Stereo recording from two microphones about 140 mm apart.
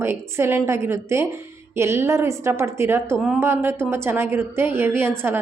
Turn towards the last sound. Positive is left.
turn(degrees=-15)  # may be behind; listen again after turning